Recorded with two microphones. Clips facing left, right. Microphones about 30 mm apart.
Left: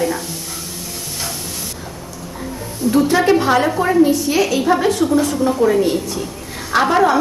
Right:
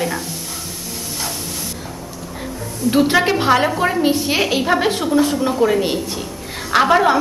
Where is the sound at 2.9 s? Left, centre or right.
Right.